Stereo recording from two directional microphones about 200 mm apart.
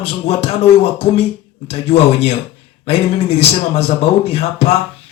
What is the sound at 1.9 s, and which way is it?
Speech, 30° left (ahead or behind).